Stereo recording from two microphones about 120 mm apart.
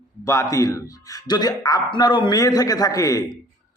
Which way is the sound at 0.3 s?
25° left (ahead or behind).